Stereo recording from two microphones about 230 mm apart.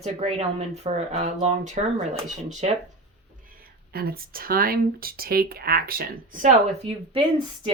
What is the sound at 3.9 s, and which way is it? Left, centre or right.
Speech, right.